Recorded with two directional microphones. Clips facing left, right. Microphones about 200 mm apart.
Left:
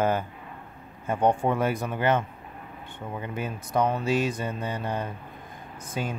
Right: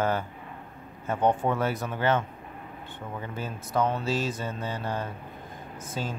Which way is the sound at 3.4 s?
10° left (ahead or behind).